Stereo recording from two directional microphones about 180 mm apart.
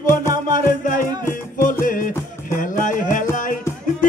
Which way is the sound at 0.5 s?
45° left (ahead or behind).